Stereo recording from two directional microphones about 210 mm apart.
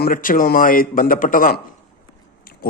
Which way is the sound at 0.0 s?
40° left (ahead or behind).